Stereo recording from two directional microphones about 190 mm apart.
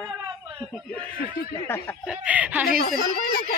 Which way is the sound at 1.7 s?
10° left (ahead or behind).